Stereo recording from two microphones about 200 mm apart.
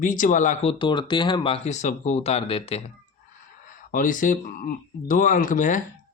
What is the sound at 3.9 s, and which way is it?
Speech, 40° left (ahead or behind).